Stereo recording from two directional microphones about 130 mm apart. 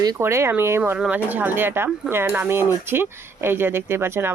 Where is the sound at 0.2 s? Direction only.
20° right (ahead or behind).